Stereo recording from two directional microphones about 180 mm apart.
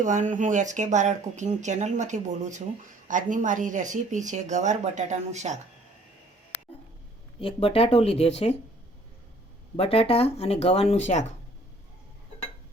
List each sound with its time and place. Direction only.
0.0 s speech: 45° right (ahead or behind)
7.4 s speech: 30° left (ahead or behind)
9.7 s speech: 35° left (ahead or behind)